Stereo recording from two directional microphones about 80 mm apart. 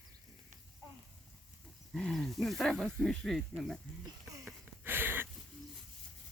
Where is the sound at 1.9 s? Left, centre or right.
Centre.